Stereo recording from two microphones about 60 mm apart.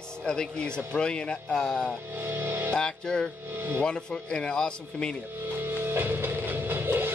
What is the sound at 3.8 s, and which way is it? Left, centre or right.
Speech, centre.